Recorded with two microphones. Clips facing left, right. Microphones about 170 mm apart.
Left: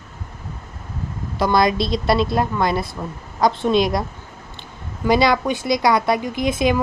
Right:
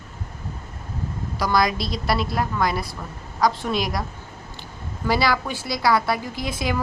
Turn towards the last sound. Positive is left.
turn(degrees=20)  # may be behind; listen again after turning